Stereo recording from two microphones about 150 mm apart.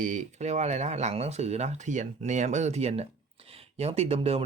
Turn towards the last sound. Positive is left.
turn(degrees=-40)  # may be behind; listen again after turning